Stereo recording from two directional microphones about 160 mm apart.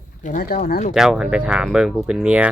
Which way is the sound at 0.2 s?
55° left (ahead or behind).